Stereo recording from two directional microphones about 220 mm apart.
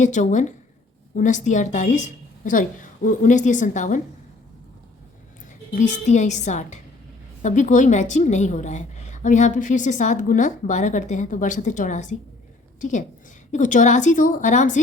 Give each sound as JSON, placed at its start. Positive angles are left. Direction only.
{"t": 0.0, "sound": "a woman's voice", "side_deg": 35}
{"t": 5.7, "sound": "a woman's voice", "side_deg": 35}